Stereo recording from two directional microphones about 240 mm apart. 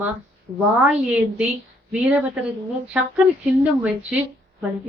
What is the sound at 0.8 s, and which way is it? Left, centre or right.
Bell, centre.